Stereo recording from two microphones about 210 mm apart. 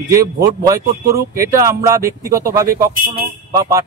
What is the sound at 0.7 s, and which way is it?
Speech, 15° right (ahead or behind).